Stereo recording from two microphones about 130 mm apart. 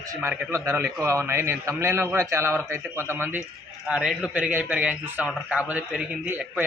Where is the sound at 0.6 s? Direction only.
20° right (ahead or behind).